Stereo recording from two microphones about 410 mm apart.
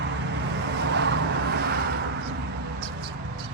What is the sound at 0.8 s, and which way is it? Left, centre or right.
Vehicle, right.